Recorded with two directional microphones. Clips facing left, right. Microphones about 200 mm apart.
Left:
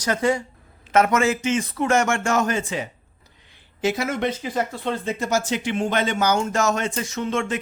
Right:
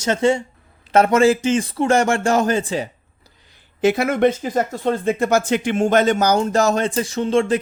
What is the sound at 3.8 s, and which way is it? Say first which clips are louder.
Speech: right 7 dB; 60° right (ahead or behind).